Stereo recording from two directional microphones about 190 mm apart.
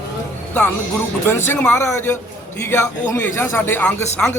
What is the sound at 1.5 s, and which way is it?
Speech, 10° left (ahead or behind).